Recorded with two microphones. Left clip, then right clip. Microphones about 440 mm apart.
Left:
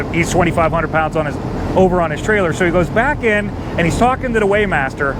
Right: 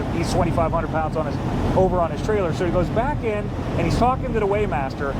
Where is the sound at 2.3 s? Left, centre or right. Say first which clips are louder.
Left 9 dB; left.